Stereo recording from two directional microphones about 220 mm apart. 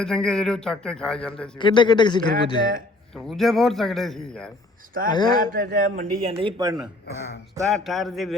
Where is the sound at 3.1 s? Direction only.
Centre (ahead or behind).